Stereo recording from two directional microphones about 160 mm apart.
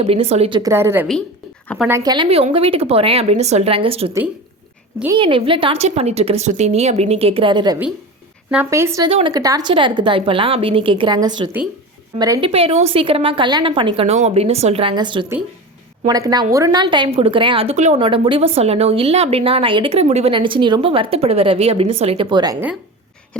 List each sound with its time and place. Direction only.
0.0 s a woman's voice: 40° right (ahead or behind)
0.6 s a woman's voice: 15° right (ahead or behind)
1.9 s a woman's voice: 25° right (ahead or behind)
5.1 s a woman's voice: 30° right (ahead or behind)
8.4 s a woman's voice: 10° right (ahead or behind)
9.0 s a woman's voice: 30° right (ahead or behind)
12.5 s a woman's voice: 40° right (ahead or behind)
18.0 s a woman's voice: 35° right (ahead or behind)